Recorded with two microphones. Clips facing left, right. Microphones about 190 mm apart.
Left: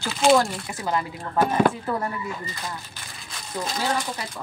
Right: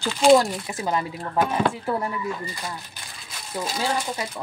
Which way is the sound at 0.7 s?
20° right (ahead or behind).